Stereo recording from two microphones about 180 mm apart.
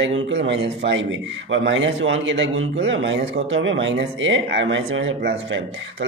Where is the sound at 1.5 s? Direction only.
90° right.